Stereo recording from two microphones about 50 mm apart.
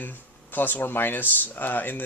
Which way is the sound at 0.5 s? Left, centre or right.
Left.